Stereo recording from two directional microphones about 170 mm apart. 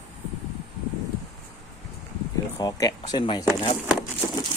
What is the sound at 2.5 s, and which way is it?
Speech, 20° left (ahead or behind).